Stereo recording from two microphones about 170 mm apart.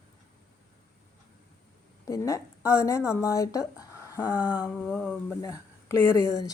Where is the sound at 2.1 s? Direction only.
20° left (ahead or behind).